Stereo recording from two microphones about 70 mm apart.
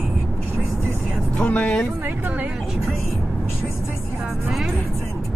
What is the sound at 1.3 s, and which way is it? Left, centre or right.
Music, centre.